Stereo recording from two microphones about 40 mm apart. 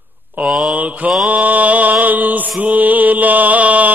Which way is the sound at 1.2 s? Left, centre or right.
Right.